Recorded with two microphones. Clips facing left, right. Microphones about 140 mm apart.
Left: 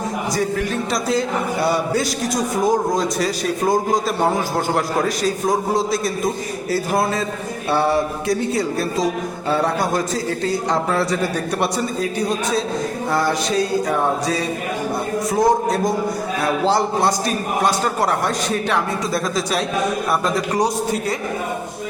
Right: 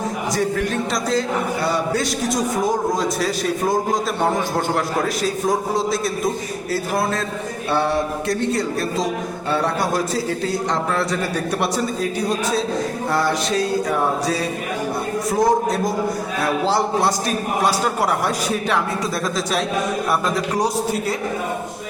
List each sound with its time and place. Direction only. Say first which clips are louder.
0.3 s a man's voice: right 1 dB; centre (ahead or behind)
12.3 s a man's voice: even; centre (ahead or behind)
15.3 s a man's voice: left 1 dB; centre (ahead or behind)
20.3 s a man's voice: left 1 dB; centre (ahead or behind)